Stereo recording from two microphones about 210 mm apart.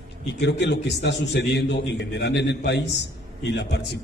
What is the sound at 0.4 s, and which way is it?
A man's voice, 55° left (ahead or behind).